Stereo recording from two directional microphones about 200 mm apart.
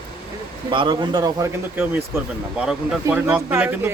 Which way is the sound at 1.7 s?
5° right (ahead or behind).